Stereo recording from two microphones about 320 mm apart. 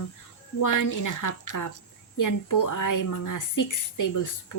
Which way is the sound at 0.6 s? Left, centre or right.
Left.